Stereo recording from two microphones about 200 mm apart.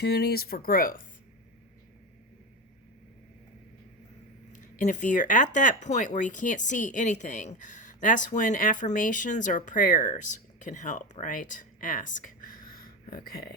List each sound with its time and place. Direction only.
0.0 s speech: 50° left (ahead or behind)
4.5 s speech: 40° left (ahead or behind)